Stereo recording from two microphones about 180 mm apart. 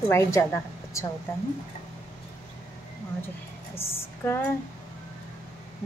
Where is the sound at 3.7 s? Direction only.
10° left (ahead or behind).